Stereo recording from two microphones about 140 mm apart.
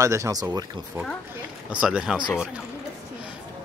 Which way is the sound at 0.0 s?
20° right (ahead or behind).